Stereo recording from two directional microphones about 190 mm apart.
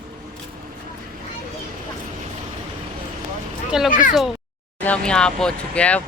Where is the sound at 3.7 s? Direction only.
Centre (ahead or behind).